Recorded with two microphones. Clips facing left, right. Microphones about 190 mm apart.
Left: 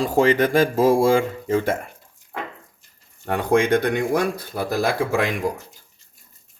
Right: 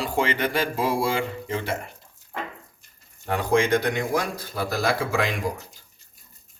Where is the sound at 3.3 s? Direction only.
55° left (ahead or behind).